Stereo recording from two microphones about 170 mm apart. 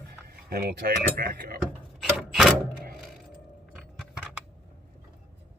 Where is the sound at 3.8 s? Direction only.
Centre (ahead or behind).